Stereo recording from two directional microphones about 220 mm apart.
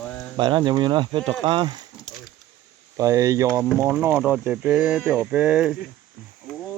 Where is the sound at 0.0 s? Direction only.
5° left (ahead or behind).